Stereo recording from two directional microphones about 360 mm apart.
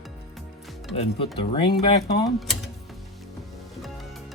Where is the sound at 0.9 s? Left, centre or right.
Centre.